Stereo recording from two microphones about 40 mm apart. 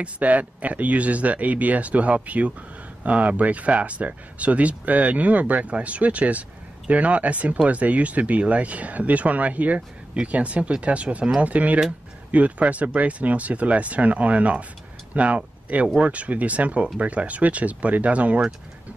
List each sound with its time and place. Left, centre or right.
0.0 s speech: right
9.8 s speech: right